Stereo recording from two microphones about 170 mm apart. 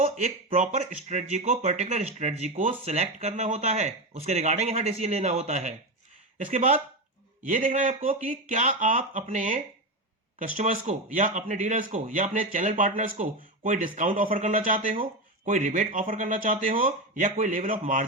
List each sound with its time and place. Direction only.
0.0 s a man's voice: 45° right (ahead or behind)